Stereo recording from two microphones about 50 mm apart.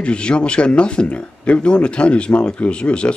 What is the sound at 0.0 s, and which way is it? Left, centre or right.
Speech, left.